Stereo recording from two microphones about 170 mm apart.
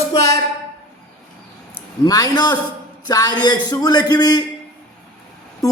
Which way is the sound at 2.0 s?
20° left (ahead or behind).